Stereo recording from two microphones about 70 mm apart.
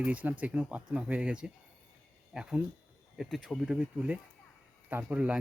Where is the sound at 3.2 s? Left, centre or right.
Centre.